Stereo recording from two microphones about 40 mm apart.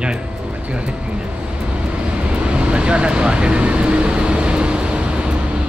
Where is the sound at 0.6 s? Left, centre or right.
Right.